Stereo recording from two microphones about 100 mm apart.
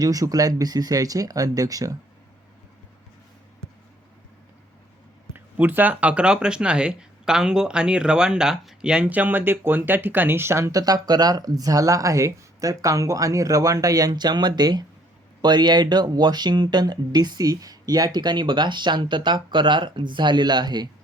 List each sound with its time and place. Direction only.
0.0 s speech: 35° right (ahead or behind)
5.3 s speech: 20° right (ahead or behind); by 20.8 s 45° right (ahead or behind)